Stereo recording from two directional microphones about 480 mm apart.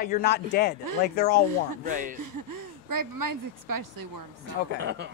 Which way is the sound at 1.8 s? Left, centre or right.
Centre.